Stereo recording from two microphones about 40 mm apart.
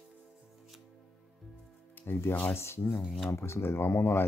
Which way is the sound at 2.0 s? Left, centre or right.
Left.